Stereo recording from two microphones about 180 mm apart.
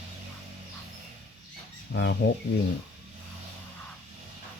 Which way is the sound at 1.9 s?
85° left.